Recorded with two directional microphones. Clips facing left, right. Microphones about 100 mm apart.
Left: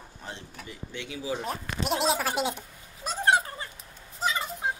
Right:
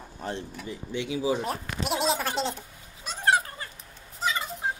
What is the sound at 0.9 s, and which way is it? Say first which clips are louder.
Speech: right 6 dB; 20° right (ahead or behind).